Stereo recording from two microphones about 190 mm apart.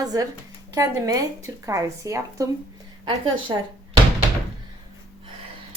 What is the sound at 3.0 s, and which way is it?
Speech, 25° right (ahead or behind).